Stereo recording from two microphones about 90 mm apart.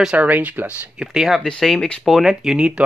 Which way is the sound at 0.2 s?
15° right (ahead or behind).